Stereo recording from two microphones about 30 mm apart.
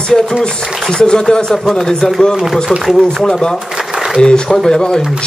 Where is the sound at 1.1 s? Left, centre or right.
Left.